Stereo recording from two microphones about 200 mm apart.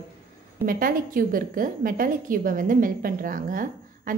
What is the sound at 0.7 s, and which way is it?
A woman's voice, 45° right (ahead or behind).